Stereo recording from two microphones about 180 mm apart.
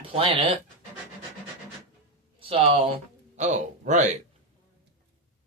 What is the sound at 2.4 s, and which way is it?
Speech, 30° right (ahead or behind).